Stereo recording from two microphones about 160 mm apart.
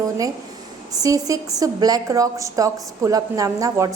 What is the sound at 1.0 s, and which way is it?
A woman's voice, 20° right (ahead or behind).